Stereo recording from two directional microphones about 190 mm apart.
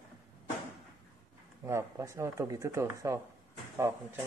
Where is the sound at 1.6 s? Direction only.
15° right (ahead or behind).